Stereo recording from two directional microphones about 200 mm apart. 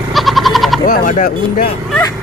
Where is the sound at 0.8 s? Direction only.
45° left (ahead or behind).